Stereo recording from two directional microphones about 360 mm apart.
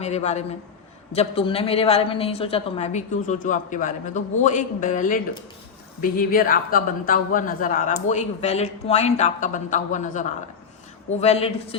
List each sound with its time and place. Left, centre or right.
0.0 s a woman's voice: centre